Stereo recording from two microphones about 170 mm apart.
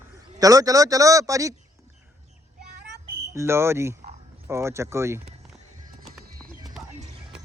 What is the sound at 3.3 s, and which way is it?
Speech, 15° right (ahead or behind).